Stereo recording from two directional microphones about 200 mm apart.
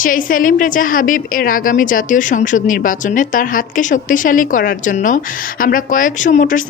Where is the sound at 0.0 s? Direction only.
45° left (ahead or behind).